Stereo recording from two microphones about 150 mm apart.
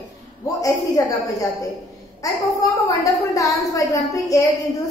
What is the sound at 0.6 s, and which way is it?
A woman's voice, 20° left (ahead or behind).